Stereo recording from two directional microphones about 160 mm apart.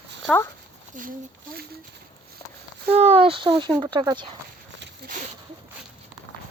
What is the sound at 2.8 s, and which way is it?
Speech, 40° right (ahead or behind).